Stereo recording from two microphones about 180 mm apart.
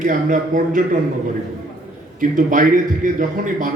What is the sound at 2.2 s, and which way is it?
A man's voice, 45° right (ahead or behind).